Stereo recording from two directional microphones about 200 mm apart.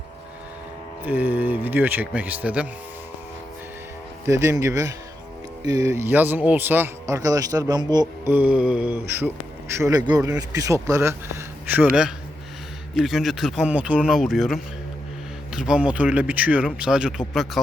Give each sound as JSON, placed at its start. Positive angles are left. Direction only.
{"t": 1.0, "sound": "a man's voice", "side_deg": -10}
{"t": 4.3, "sound": "a man's voice", "side_deg": -15}